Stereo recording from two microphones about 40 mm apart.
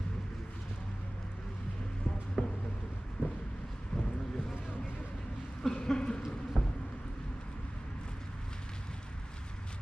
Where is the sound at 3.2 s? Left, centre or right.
Right.